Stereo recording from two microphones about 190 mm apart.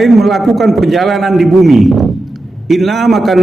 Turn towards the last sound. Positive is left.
turn(degrees=0)  # may be behind; listen again after turning